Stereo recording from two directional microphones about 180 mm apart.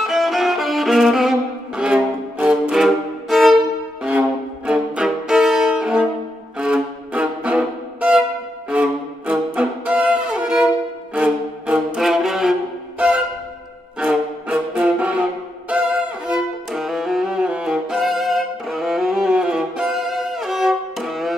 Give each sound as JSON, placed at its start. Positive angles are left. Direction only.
{"t": 0.0, "sound": "violin", "side_deg": 0}
{"t": 1.8, "sound": "music", "side_deg": -5}
{"t": 4.6, "sound": "music", "side_deg": -5}
{"t": 6.6, "sound": "violin", "side_deg": -5}
{"t": 8.6, "sound": "music", "side_deg": -5}
{"t": 13.9, "sound": "music", "side_deg": -5}